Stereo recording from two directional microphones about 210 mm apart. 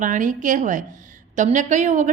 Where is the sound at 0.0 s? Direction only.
40° right (ahead or behind).